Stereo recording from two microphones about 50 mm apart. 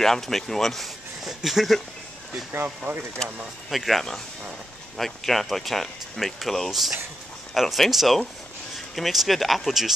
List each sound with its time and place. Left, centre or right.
0.0 s speech: centre
2.5 s speech: right
3.2 s speech: centre
3.7 s speech: centre